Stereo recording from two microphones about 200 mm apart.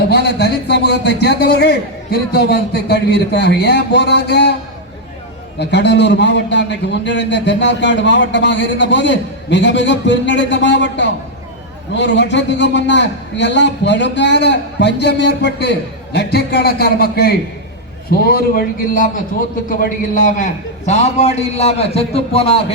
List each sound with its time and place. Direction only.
0.1 s a man's voice: 55° left (ahead or behind)
5.5 s a man's voice: 60° left (ahead or behind); by 22.6 s 30° left (ahead or behind)